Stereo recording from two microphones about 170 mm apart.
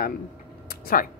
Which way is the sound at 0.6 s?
60° left (ahead or behind).